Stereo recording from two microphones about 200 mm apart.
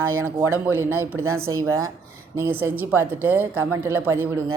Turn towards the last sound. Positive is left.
turn(degrees=-10)  # may be behind; listen again after turning